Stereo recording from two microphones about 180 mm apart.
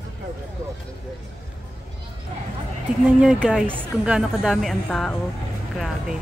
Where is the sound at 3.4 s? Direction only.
5° right (ahead or behind).